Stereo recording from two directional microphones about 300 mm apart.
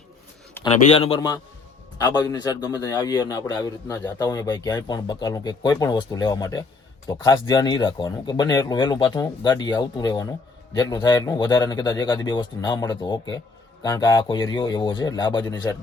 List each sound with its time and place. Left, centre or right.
0.7 s a man's voice: centre